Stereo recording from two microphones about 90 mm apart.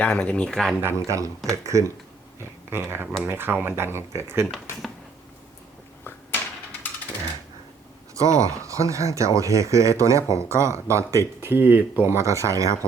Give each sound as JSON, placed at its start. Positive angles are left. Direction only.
{"t": 0.0, "sound": "speech", "side_deg": 15}
{"t": 0.8, "sound": "speech", "side_deg": -30}
{"t": 8.1, "sound": "speech", "side_deg": -35}
{"t": 12.1, "sound": "speech", "side_deg": -35}